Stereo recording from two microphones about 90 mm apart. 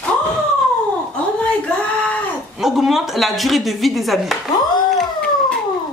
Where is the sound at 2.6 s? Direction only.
5° right (ahead or behind).